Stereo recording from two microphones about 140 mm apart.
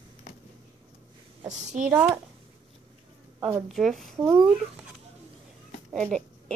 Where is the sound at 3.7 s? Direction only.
Centre (ahead or behind).